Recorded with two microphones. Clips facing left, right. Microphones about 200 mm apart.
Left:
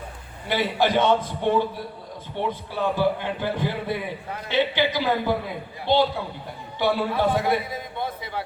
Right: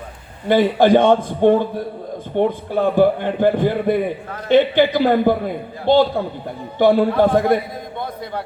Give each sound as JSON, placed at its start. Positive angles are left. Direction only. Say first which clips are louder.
{"t": 0.4, "sound": "a man's voice", "louder": "right 9 dB", "side_deg": -50}